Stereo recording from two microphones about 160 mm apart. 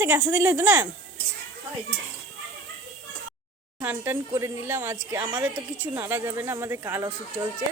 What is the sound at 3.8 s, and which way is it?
Speech, 10° right (ahead or behind).